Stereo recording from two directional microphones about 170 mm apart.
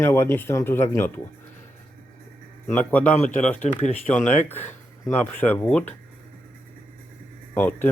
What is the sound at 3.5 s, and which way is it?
Speech, 45° left (ahead or behind).